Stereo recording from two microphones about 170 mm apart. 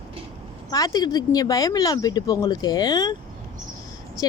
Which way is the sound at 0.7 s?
20° left (ahead or behind).